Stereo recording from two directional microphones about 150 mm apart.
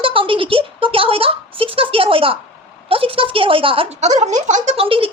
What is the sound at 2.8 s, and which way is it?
A woman's voice, 40° right (ahead or behind).